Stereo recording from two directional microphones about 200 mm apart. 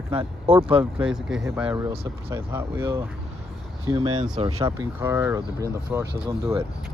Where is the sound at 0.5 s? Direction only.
25° right (ahead or behind).